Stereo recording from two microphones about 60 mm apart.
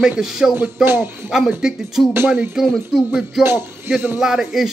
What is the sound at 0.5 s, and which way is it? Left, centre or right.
Music, right.